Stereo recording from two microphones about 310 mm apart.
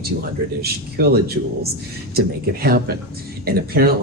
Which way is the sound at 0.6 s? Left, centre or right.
Right.